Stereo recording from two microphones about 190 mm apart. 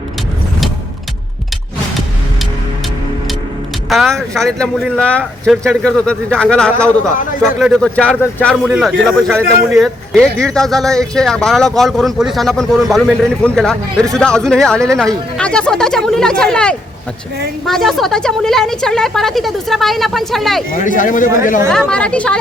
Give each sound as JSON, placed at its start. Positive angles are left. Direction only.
{"t": 3.8, "sound": "speech", "side_deg": 0}
{"t": 20.8, "sound": "speech", "side_deg": 45}
{"t": 21.7, "sound": "speech", "side_deg": 5}